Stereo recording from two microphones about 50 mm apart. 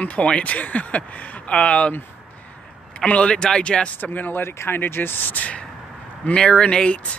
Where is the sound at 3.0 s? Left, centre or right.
Left.